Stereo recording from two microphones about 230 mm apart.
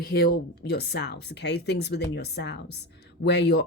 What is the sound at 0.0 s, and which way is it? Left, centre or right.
Speech, left.